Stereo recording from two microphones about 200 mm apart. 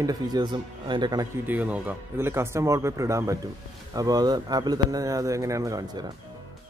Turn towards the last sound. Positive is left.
turn(degrees=-15)  # may be behind; listen again after turning